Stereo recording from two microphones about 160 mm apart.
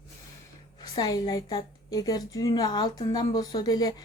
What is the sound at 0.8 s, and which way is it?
A woman's voice, 25° left (ahead or behind).